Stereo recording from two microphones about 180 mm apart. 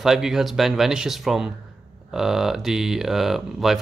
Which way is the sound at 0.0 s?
Centre (ahead or behind).